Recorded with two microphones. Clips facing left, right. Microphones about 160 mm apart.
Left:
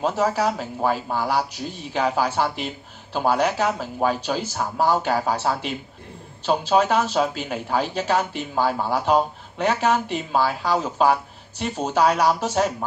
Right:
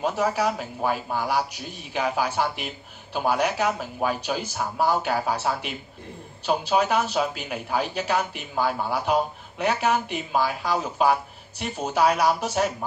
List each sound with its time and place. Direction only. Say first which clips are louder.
0.0 s speech: left 2 dB; 35° left (ahead or behind)